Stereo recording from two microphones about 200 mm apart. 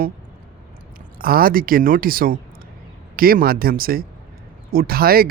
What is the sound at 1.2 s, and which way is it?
Speech, 45° right (ahead or behind).